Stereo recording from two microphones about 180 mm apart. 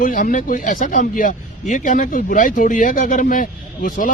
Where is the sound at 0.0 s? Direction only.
45° left (ahead or behind).